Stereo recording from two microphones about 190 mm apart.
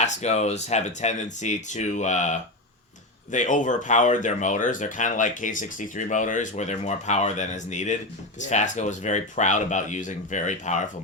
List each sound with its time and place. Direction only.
0.0 s speech: 35° left (ahead or behind)